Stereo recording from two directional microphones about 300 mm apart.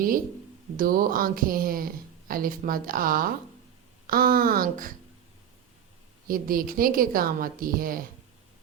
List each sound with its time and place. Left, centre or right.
0.8 s speech: right
6.2 s speech: right